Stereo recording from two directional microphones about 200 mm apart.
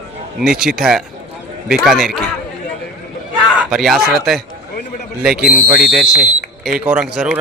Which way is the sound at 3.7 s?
Centre (ahead or behind).